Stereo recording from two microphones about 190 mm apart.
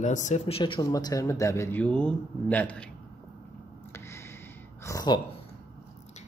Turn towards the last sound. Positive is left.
turn(degrees=20)  # may be behind; listen again after turning